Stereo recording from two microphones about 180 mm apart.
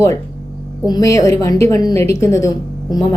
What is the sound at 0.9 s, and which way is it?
A woman's voice, 20° left (ahead or behind).